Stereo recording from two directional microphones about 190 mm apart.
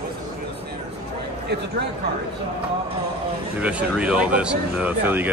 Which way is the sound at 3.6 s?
5° right (ahead or behind).